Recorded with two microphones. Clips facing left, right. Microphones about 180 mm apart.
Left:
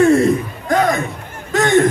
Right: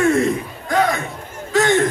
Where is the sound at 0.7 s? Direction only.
45° left (ahead or behind).